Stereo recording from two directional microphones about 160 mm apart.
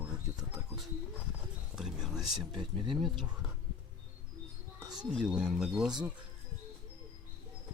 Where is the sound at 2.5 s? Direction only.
30° right (ahead or behind).